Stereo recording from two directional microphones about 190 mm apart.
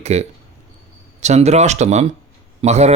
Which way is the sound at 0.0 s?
35° right (ahead or behind).